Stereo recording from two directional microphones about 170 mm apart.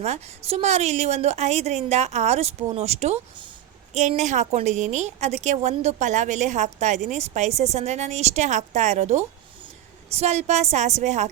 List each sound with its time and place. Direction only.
0.0 s a woman's voice: 40° right (ahead or behind)